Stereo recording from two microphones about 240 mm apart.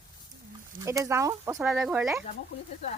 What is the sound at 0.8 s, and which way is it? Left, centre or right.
Speech, centre.